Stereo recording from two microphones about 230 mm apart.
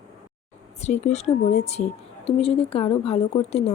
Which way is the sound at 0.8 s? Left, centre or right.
Left.